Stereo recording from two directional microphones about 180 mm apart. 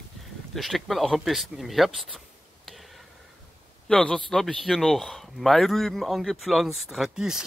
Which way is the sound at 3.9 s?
5° left (ahead or behind).